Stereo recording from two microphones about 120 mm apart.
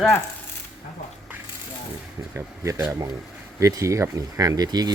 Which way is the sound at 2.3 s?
25° right (ahead or behind).